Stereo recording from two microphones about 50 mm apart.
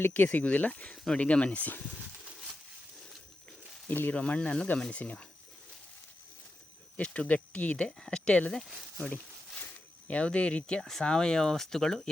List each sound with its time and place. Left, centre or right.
0.0 s speech: left
3.8 s speech: left
4.1 s speech: left
6.9 s speech: left
7.8 s speech: centre
10.1 s speech: left